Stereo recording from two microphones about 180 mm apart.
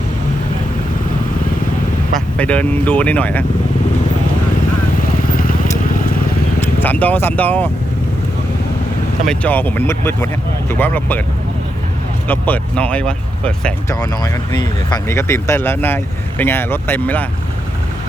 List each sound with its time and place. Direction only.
2.1 s speech: 5° left (ahead or behind)
5.4 s vehicle: 50° left (ahead or behind)
6.6 s speech: 10° left (ahead or behind)
9.2 s speech: 5° left (ahead or behind)
12.3 s speech: 10° left (ahead or behind)
14.0 s speech: 25° left (ahead or behind)